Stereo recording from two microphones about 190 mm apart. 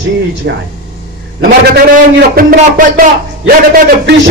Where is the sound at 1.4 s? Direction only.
55° right (ahead or behind).